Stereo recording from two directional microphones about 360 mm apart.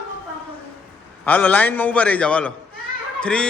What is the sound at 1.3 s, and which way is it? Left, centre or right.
A man's voice, centre.